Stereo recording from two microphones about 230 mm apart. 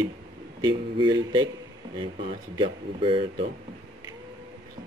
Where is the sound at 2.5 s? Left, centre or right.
Right.